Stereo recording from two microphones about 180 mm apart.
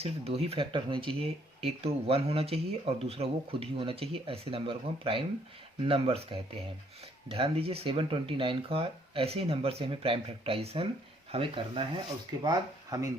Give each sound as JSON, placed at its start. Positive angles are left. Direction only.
{"t": 0.0, "sound": "speech", "side_deg": -35}
{"t": 7.3, "sound": "speech", "side_deg": -30}